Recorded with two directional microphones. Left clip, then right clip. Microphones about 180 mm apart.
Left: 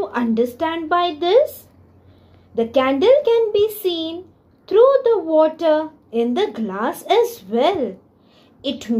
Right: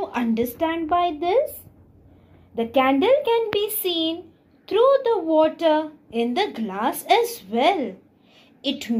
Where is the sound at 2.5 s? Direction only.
40° left (ahead or behind).